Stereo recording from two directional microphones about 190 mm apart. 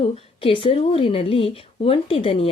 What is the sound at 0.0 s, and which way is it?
Speech, 30° left (ahead or behind).